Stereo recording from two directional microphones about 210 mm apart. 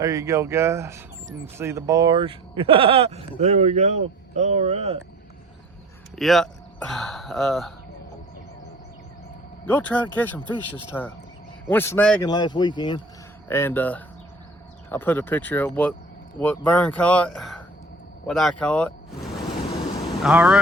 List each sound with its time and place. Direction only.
0.0 s speech: 15° right (ahead or behind); by 4.9 s 30° right (ahead or behind)
6.1 s speech: centre (ahead or behind)
9.6 s speech: 10° left (ahead or behind)
12.2 s speech: 20° left (ahead or behind)
13.5 s speech: 10° left (ahead or behind)
20.2 s speech: 5° right (ahead or behind)